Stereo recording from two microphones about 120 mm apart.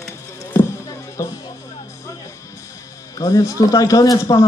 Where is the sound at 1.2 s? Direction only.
25° left (ahead or behind).